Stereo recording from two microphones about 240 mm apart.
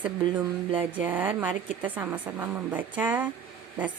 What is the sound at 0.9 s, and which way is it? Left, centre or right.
Speech, centre.